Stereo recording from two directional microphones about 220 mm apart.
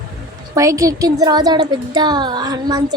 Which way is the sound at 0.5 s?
15° right (ahead or behind).